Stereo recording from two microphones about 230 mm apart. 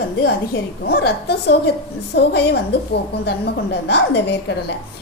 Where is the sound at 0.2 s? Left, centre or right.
Left.